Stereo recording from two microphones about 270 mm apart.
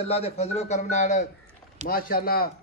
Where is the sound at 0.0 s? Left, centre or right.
Left.